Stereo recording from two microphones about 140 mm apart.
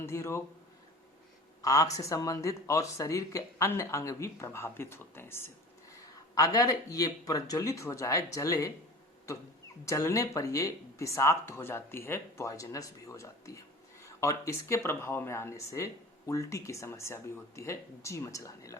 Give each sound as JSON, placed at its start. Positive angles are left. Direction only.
{"t": 0.0, "sound": "a sound", "side_deg": 20}
{"t": 1.6, "sound": "speech", "side_deg": 25}
{"t": 9.8, "sound": "speech", "side_deg": 20}